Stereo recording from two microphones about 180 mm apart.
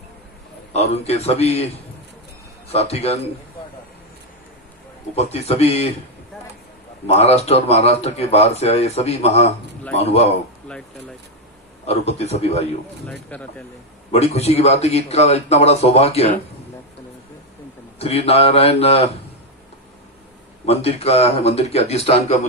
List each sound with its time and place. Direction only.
0.7 s a man's voice: 35° left (ahead or behind)
2.7 s a man's voice: 35° left (ahead or behind)
5.1 s a man's voice: 35° left (ahead or behind)
7.1 s a man's voice: 35° left (ahead or behind)
11.8 s a man's voice: 35° left (ahead or behind)
13.1 s speech: 10° left (ahead or behind)
14.1 s a man's voice: 35° left (ahead or behind)
17.9 s a man's voice: 35° left (ahead or behind)
20.6 s a man's voice: 35° left (ahead or behind)